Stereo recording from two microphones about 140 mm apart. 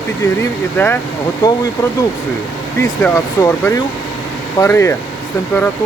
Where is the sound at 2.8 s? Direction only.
20° left (ahead or behind).